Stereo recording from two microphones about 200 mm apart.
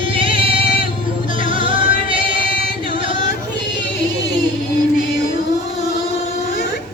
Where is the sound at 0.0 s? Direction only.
25° right (ahead or behind).